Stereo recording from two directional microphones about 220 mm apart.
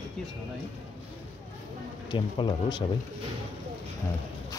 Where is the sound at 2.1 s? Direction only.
20° left (ahead or behind).